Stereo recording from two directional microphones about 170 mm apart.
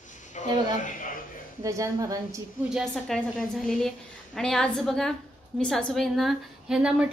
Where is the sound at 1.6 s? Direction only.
20° right (ahead or behind).